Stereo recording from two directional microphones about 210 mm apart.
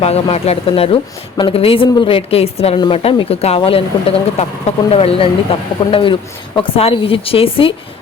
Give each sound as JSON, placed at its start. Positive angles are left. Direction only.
{"t": 0.0, "sound": "a woman's voice", "side_deg": 30}